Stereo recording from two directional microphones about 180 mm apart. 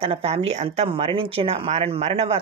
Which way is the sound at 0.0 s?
35° right (ahead or behind).